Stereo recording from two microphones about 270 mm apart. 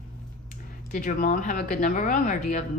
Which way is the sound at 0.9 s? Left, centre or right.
Left.